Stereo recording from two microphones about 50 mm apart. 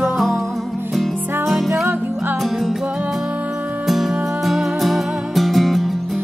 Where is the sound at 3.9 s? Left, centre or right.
Centre.